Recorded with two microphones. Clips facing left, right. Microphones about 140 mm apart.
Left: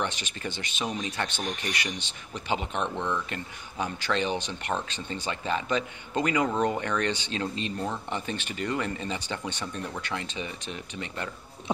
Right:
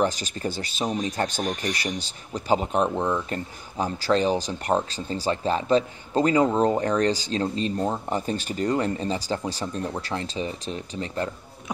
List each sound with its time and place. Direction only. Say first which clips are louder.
0.0 s speech: right 7 dB; 35° right (ahead or behind)